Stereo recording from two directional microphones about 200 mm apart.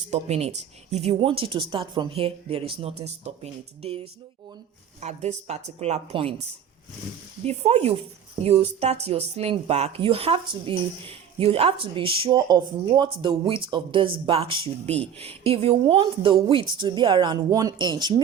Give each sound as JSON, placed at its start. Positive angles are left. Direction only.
{"t": 0.1, "sound": "speech", "side_deg": -35}
{"t": 7.4, "sound": "speech", "side_deg": -30}